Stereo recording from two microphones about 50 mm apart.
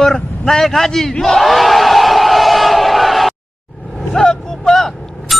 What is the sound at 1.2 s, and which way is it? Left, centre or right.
Crowd, centre.